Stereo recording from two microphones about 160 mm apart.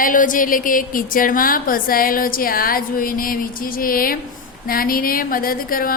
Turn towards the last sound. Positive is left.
turn(degrees=65)  # may be behind; listen again after turning